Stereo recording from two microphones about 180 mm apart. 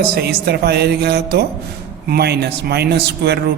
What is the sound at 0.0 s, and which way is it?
Speech, 60° right (ahead or behind).